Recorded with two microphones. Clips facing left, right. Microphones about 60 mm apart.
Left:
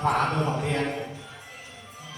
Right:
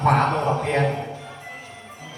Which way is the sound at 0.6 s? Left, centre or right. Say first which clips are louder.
Right 6 dB; right.